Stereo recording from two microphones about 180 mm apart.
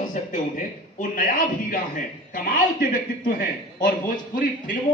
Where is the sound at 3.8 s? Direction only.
50° left (ahead or behind).